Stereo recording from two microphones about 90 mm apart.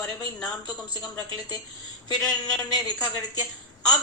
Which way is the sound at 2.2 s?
5° left (ahead or behind).